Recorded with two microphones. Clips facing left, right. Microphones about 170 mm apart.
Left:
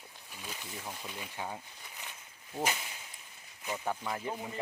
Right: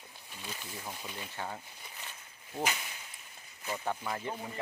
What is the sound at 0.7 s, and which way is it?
Speech, centre (ahead or behind).